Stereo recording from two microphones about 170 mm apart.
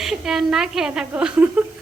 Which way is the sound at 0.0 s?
Centre (ahead or behind).